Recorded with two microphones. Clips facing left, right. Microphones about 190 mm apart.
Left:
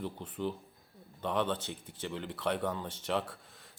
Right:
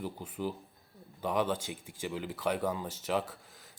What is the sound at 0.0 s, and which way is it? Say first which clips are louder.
Speech: even; 5° right (ahead or behind).